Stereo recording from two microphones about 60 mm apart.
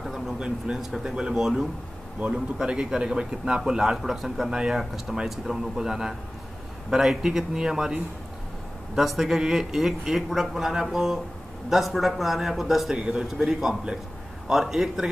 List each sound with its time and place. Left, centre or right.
0.0 s a sound: centre
0.4 s a man's voice: centre
2.1 s a man's voice: centre
12.9 s a man's voice: centre